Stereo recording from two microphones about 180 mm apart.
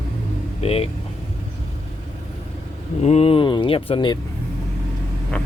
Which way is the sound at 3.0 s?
35° left (ahead or behind).